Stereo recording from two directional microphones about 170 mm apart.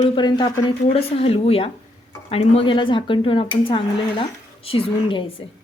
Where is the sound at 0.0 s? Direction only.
25° left (ahead or behind).